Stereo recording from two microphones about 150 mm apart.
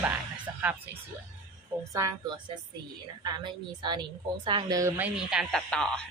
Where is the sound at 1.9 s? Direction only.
20° right (ahead or behind).